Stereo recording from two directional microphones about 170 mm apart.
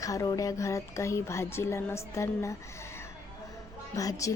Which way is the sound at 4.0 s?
20° left (ahead or behind).